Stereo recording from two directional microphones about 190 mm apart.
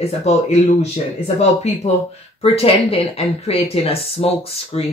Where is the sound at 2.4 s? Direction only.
30° left (ahead or behind).